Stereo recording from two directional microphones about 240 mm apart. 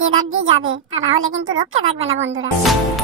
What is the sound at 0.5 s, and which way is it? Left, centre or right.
Speech, right.